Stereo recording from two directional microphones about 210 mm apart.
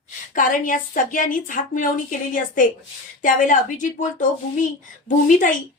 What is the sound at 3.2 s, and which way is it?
A woman's voice, 40° left (ahead or behind).